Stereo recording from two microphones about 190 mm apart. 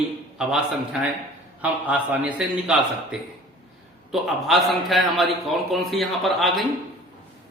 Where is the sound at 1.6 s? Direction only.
10° right (ahead or behind).